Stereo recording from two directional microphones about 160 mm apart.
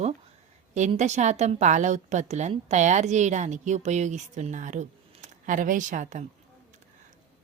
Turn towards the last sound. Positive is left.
turn(degrees=-55)  # may be behind; listen again after turning